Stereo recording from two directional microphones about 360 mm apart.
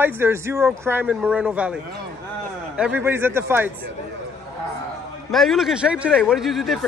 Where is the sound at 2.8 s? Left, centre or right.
Centre.